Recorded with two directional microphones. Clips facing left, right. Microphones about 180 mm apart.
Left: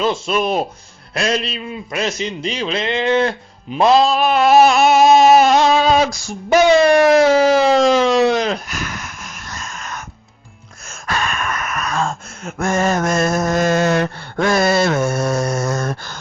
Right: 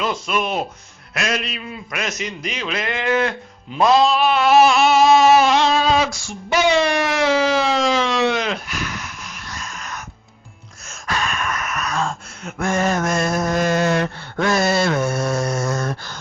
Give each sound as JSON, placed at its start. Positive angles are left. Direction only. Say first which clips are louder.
{"t": 0.0, "sound": "a man's voice", "louder": "left 4 dB", "side_deg": 30}
{"t": 5.7, "sound": "a sound", "louder": "left 3 dB", "side_deg": 45}
{"t": 11.0, "sound": "gasp", "louder": "left 2 dB", "side_deg": 50}